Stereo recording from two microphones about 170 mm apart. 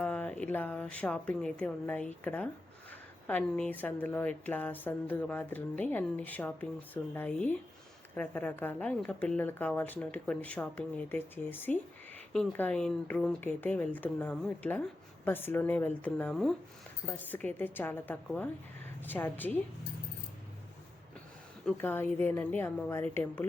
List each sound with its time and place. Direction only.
0.0 s speech: 10° left (ahead or behind)
21.8 s speech: 10° left (ahead or behind)